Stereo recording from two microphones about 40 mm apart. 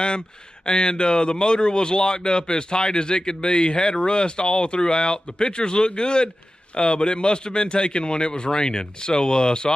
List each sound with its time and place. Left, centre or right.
0.7 s speech: left